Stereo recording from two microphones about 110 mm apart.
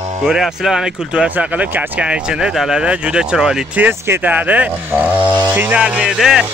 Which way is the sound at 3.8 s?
20° right (ahead or behind).